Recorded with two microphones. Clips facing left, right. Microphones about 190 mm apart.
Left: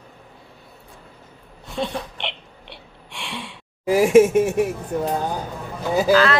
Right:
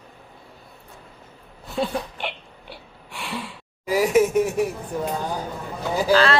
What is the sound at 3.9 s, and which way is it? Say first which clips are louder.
Speech: left 5 dB; 25° left (ahead or behind).